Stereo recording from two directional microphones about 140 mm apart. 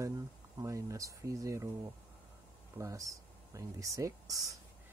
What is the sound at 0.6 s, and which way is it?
Speech, 25° right (ahead or behind).